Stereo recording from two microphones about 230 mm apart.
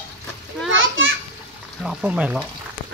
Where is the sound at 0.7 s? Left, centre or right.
Right.